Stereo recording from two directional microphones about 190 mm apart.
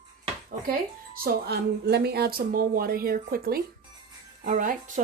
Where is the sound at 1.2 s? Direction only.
55° right (ahead or behind).